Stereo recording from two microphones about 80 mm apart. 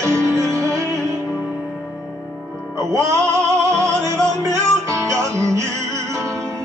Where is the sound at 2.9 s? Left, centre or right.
Right.